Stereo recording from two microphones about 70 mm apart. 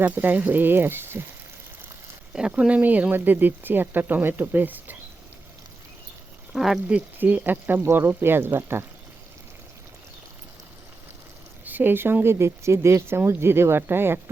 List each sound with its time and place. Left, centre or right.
0.0 s speech: right
2.5 s speech: centre
6.5 s speech: centre
6.8 s speech: right
11.6 s speech: right